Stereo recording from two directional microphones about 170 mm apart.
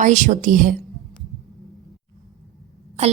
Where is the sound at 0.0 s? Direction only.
45° right (ahead or behind).